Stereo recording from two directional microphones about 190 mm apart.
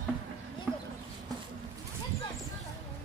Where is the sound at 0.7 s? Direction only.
5° right (ahead or behind).